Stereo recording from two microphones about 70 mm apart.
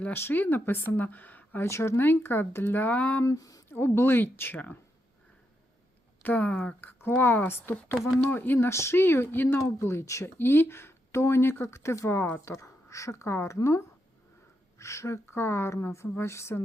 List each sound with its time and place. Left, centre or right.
0.0 s speech: left
1.6 s speech: left
2.0 s speech: left
3.2 s speech: left
3.7 s speech: left
6.2 s speech: left
8.5 s speech: left
14.8 s a woman's voice: left